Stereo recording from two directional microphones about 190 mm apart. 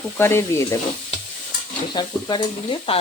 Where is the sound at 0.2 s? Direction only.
15° left (ahead or behind).